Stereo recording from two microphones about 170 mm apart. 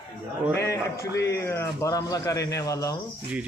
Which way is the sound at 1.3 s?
15° left (ahead or behind).